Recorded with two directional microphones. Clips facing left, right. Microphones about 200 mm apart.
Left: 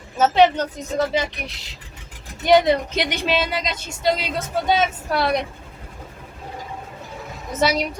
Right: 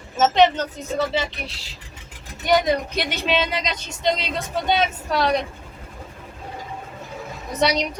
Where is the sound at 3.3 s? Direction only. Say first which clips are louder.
Right 2 dB; 5° left (ahead or behind).